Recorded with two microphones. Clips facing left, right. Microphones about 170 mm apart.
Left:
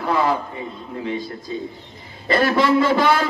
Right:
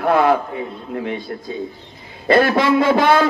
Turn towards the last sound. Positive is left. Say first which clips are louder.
# right 3 dB
turn(degrees=-55)  # may be behind; listen again after turning